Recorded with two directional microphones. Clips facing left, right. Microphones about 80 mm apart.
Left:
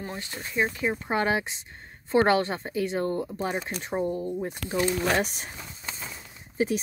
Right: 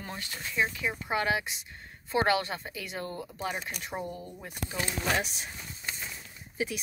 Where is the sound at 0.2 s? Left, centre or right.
Left.